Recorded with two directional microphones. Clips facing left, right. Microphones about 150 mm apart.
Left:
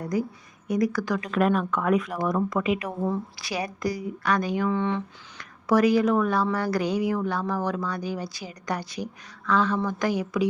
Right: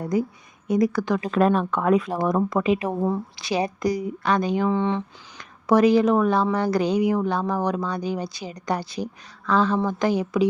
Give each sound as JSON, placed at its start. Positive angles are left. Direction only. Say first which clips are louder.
{"t": 0.0, "sound": "a woman's voice", "louder": "right 3 dB", "side_deg": -25}